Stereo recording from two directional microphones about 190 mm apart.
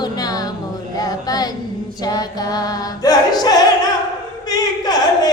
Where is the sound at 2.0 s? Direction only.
20° left (ahead or behind).